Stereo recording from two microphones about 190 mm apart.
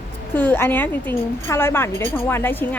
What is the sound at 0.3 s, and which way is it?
A woman's voice, 10° left (ahead or behind).